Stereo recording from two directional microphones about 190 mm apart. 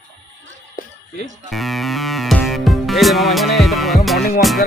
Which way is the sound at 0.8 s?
45° left (ahead or behind).